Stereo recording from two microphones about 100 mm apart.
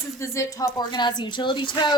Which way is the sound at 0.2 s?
35° left (ahead or behind).